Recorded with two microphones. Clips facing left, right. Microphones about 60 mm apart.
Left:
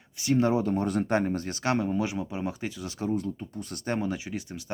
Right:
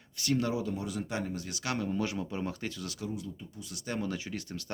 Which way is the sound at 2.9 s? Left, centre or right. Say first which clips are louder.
Left 9 dB; left.